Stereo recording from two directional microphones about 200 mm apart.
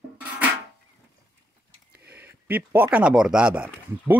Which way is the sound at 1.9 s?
50° right (ahead or behind).